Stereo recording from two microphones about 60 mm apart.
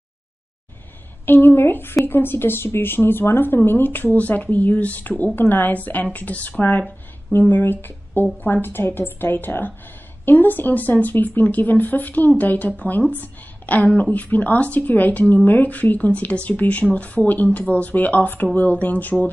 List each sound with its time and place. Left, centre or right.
1.2 s a woman's voice: left